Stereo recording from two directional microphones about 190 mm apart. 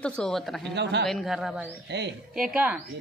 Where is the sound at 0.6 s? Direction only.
65° right (ahead or behind).